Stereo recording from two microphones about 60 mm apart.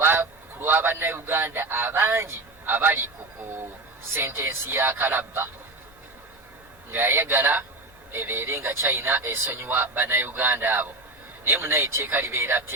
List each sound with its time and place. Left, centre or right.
0.0 s speech: right
6.9 s speech: right